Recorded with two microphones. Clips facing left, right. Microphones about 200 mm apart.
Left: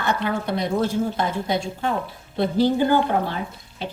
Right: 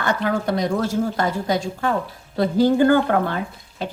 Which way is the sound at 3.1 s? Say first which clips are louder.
Right 3 dB; 60° right (ahead or behind).